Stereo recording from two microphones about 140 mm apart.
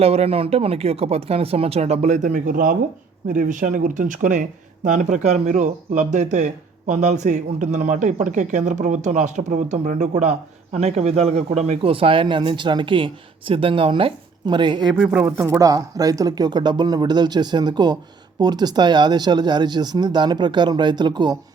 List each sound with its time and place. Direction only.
0.0 s speech: 45° right (ahead or behind); by 2.7 s 85° right
3.2 s speech: 70° right (ahead or behind); by 14.8 s 35° right (ahead or behind)
14.9 s speech: 10° right (ahead or behind); by 21.3 s 30° right (ahead or behind)